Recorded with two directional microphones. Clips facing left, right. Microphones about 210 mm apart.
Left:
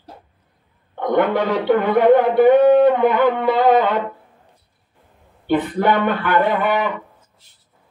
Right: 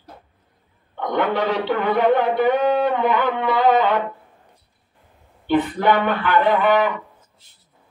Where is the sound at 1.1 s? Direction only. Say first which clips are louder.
Left 3 dB; 50° left (ahead or behind).